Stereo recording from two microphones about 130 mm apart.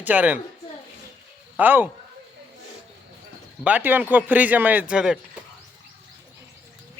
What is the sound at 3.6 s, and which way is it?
Speech, 15° right (ahead or behind).